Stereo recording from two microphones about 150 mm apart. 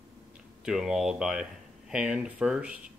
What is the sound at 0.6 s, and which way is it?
Speech, 5° right (ahead or behind).